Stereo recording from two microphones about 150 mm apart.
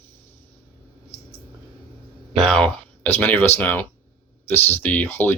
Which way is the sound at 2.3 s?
Centre (ahead or behind).